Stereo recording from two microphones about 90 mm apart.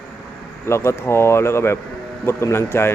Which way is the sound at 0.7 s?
30° left (ahead or behind).